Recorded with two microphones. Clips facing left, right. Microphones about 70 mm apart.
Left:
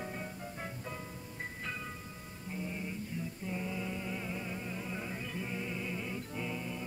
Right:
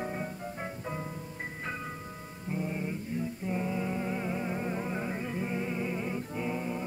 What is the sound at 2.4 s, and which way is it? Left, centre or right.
Music, right.